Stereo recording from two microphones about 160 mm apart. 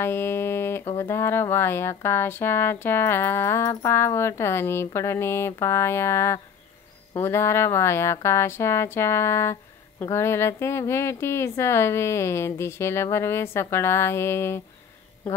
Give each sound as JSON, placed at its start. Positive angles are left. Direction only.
{"t": 0.0, "sound": "speech", "side_deg": 15}